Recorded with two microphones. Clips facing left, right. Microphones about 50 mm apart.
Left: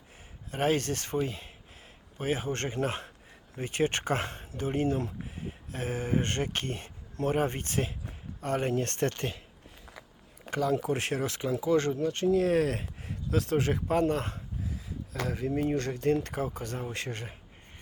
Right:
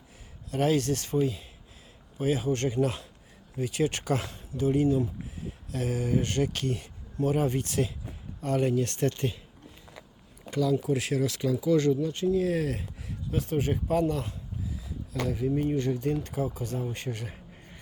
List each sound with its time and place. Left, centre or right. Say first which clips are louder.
0.5 s speech: right 2 dB; left
10.5 s speech: right 2 dB; left
11.9 s speech: even; left
13.3 s speech: left 1 dB; left